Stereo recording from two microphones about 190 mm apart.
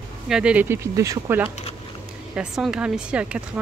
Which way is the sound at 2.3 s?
5° right (ahead or behind).